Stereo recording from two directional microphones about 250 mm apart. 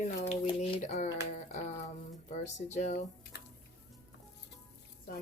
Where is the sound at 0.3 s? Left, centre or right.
Left.